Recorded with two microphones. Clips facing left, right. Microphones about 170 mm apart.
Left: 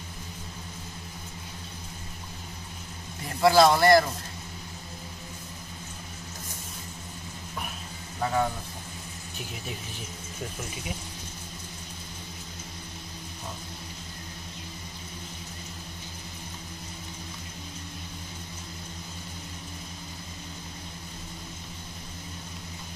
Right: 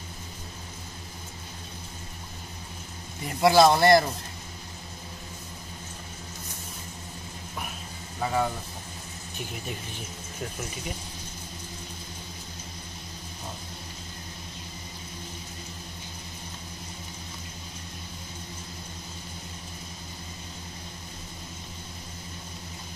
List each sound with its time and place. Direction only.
3.3 s speech: 20° right (ahead or behind)
8.2 s speech: 5° right (ahead or behind)